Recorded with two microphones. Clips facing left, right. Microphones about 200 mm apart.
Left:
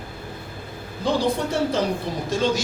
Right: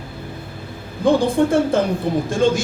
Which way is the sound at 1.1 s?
50° right (ahead or behind).